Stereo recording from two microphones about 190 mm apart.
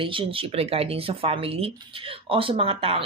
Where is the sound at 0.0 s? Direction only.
30° right (ahead or behind).